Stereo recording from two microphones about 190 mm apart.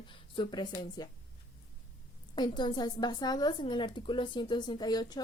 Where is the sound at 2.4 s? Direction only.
25° left (ahead or behind).